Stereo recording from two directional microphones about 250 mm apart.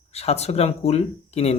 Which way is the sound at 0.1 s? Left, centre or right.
Left.